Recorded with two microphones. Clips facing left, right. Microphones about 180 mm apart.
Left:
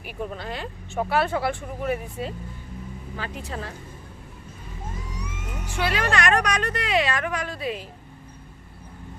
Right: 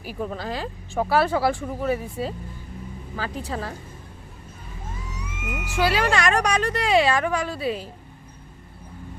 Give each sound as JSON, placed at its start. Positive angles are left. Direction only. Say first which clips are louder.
{"t": 0.0, "sound": "speech", "louder": "right 3 dB", "side_deg": -35}
{"t": 5.2, "sound": "a sound", "louder": "right 3 dB", "side_deg": -10}
{"t": 5.8, "sound": "speech", "louder": "right 3 dB", "side_deg": -30}